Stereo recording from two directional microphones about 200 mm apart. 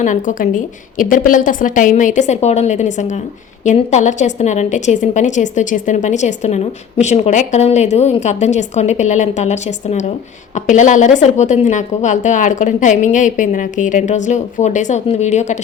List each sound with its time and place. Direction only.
0.0 s a woman's voice: 40° left (ahead or behind)